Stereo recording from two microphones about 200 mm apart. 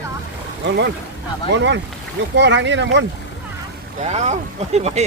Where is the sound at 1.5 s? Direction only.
60° right (ahead or behind).